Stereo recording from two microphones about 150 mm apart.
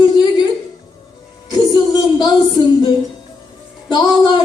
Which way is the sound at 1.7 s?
25° left (ahead or behind).